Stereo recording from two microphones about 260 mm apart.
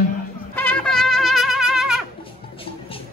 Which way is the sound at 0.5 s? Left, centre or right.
Centre.